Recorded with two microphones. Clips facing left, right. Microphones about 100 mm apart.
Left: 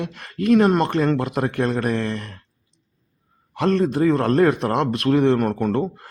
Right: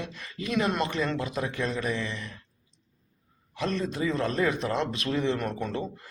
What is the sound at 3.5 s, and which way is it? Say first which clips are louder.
Speech: left 10 dB; 60° left (ahead or behind).